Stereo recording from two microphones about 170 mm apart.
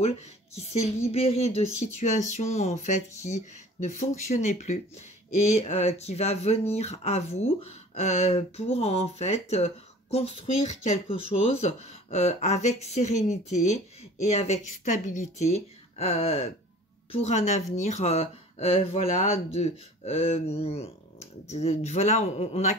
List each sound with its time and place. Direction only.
0.6 s speech: 35° left (ahead or behind)